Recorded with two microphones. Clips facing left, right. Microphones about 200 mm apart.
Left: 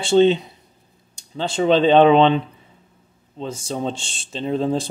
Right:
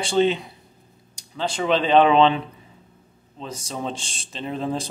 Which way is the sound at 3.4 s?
30° left (ahead or behind).